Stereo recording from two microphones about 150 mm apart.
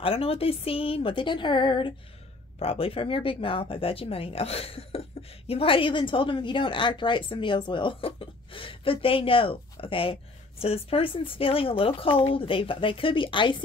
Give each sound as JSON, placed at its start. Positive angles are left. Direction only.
{"t": 0.0, "sound": "a woman's voice", "side_deg": 40}